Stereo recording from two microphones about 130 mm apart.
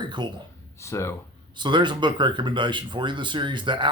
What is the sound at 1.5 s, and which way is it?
Speech, 35° right (ahead or behind).